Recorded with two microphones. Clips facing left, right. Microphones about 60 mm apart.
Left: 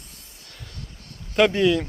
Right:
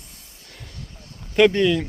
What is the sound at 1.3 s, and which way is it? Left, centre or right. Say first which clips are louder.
Speech: right 2 dB; centre.